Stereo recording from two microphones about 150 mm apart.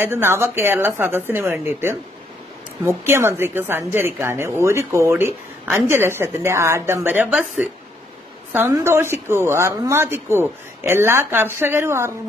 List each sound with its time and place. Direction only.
0.0 s a woman's voice: 15° right (ahead or behind)
3.0 s a woman's voice: 15° right (ahead or behind)